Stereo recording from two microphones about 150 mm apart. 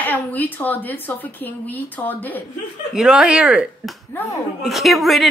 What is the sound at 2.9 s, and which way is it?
A woman's voice, 5° right (ahead or behind).